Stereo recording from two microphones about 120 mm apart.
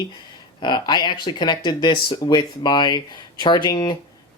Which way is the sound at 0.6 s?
40° left (ahead or behind).